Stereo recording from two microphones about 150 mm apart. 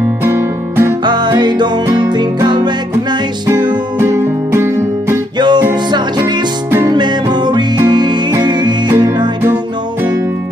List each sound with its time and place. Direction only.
0.2 s music: 15° right (ahead or behind)
1.0 s music: 30° right (ahead or behind)
5.4 s music: 30° right (ahead or behind)